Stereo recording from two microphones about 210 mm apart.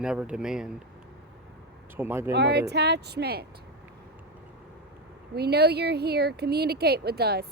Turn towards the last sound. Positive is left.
turn(degrees=-50)  # may be behind; listen again after turning